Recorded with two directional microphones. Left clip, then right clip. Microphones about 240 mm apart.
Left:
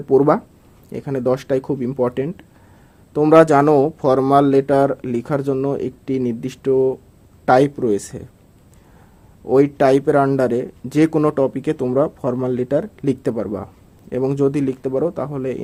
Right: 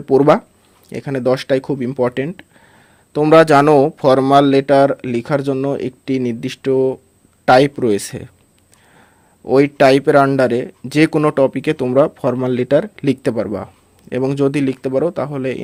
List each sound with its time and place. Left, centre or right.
0.0 s a man's voice: right
9.5 s a man's voice: right